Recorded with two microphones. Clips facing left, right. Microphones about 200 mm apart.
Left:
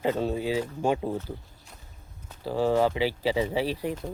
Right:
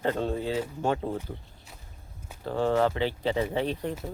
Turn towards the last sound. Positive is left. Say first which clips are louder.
# left 1 dB
turn(degrees=5)  # may be behind; listen again after turning